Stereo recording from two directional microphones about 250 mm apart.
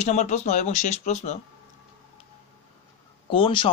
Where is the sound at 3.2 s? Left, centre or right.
Centre.